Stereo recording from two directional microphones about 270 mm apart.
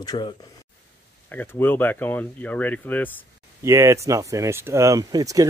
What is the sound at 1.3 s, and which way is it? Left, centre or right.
Speech, centre.